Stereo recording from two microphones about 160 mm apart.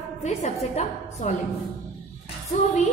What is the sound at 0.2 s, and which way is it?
A woman's voice, 45° left (ahead or behind).